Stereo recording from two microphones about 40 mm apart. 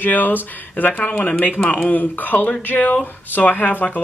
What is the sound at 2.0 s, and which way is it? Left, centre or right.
Speech, left.